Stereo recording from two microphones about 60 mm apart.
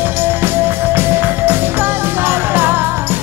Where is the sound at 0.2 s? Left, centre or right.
Right.